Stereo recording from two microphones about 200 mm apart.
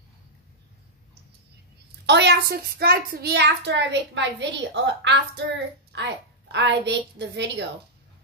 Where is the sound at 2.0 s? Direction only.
60° right (ahead or behind).